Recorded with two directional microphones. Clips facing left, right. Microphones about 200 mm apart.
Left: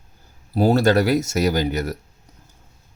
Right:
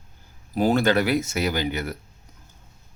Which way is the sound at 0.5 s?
35° left (ahead or behind).